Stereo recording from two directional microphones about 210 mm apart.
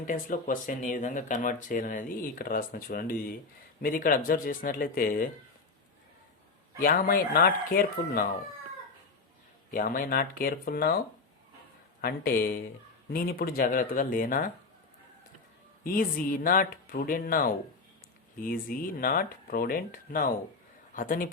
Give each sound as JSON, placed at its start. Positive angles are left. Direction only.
{"t": 0.0, "sound": "speech", "side_deg": 40}
{"t": 6.7, "sound": "speech", "side_deg": 45}
{"t": 9.7, "sound": "speech", "side_deg": 45}
{"t": 12.0, "sound": "speech", "side_deg": 45}
{"t": 15.8, "sound": "speech", "side_deg": 40}